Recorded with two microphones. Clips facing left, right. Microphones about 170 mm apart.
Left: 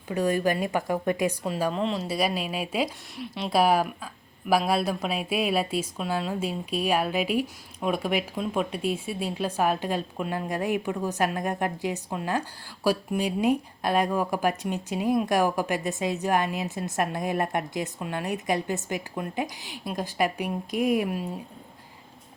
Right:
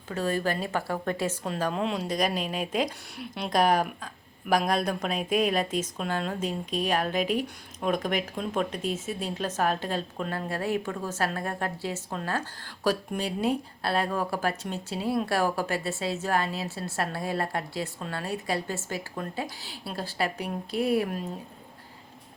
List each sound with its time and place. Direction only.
0.1 s a woman's voice: 15° left (ahead or behind)
1.7 s a woman's voice: centre (ahead or behind)